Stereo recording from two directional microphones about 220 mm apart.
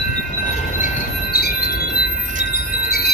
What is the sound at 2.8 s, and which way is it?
Chime, 45° left (ahead or behind).